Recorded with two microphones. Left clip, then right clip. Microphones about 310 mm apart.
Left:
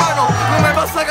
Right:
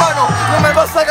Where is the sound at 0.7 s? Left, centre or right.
Centre.